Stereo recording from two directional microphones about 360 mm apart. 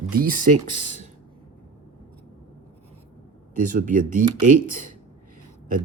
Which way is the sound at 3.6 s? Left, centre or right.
Right.